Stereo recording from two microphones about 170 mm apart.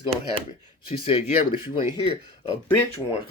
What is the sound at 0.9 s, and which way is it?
Speech, 30° left (ahead or behind).